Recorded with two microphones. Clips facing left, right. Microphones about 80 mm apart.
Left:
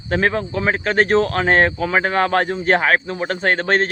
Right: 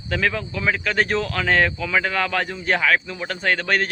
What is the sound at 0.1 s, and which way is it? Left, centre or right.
Speech, left.